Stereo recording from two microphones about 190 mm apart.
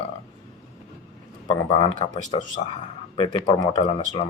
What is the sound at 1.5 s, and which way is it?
Speech, 30° left (ahead or behind).